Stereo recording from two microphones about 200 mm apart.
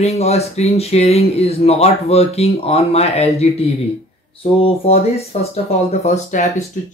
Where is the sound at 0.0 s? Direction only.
30° left (ahead or behind).